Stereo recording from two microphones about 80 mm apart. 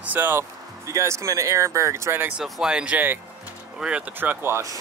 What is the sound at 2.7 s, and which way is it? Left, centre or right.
Speech, centre.